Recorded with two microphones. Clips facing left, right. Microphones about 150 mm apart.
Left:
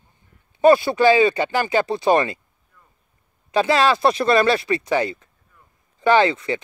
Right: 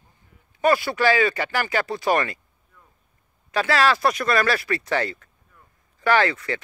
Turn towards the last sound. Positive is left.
turn(degrees=20)  # may be behind; listen again after turning